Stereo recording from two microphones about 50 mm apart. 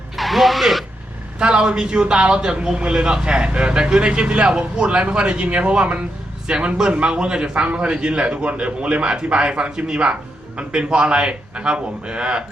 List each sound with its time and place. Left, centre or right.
0.2 s music: centre
1.4 s a man's voice: centre